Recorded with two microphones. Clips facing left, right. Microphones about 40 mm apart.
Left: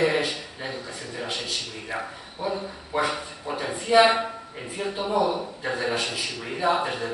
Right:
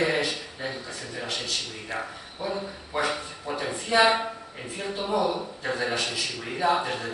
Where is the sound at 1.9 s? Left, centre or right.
Centre.